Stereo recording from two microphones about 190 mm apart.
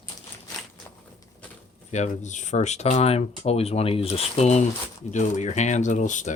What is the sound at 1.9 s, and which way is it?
Speech, 40° left (ahead or behind).